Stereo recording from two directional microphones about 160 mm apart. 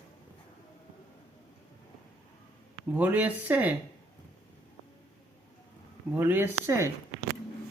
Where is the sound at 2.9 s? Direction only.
10° right (ahead or behind).